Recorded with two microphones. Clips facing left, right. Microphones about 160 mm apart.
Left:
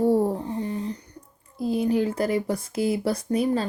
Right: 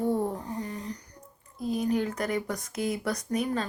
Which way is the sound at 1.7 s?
30° left (ahead or behind).